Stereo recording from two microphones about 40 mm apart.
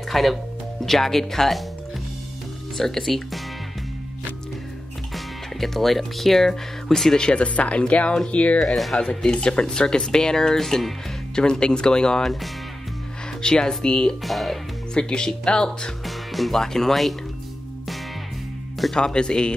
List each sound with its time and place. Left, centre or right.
0.1 s speech: centre
2.8 s speech: centre
5.1 s speech: centre
7.2 s speech: left
8.7 s speech: centre
9.0 s speech: centre
12.2 s speech: centre
13.4 s speech: centre
14.2 s speech: centre
15.0 s speech: left
16.1 s music: centre
16.6 s speech: centre
18.9 s speech: left